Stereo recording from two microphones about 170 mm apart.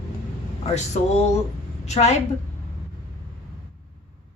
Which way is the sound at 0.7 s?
40° left (ahead or behind).